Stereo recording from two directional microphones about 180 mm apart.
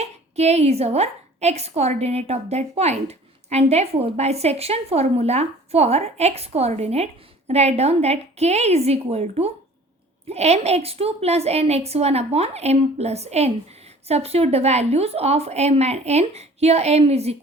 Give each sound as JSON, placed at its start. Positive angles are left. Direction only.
{"t": 0.0, "sound": "a woman's voice", "side_deg": -35}